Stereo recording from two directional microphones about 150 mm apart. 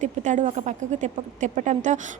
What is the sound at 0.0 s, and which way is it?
A woman's voice, 55° right (ahead or behind).